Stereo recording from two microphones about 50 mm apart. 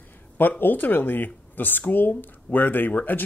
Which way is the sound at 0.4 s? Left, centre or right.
Left.